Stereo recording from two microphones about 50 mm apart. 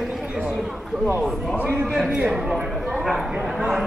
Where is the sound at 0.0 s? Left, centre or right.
Centre.